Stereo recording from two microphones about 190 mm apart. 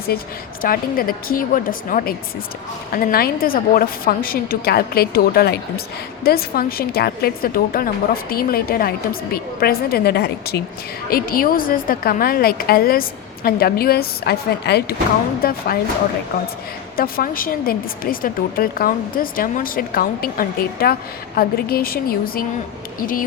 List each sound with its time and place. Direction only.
0.6 s a woman's voice: 50° left (ahead or behind)
17.0 s a woman's voice: 50° left (ahead or behind)